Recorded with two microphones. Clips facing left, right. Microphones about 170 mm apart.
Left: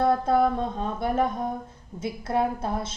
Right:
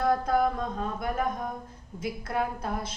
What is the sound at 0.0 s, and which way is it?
Speech, 30° left (ahead or behind).